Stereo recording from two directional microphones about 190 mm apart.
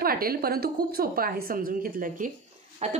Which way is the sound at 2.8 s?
35° right (ahead or behind).